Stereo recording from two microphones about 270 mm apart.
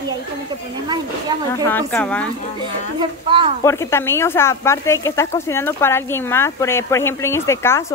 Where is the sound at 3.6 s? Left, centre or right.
Centre.